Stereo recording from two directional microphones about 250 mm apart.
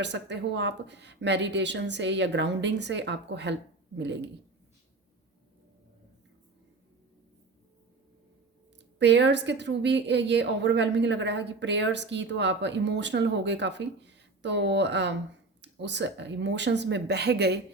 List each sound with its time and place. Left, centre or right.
0.0 s a woman's voice: right
9.0 s a woman's voice: right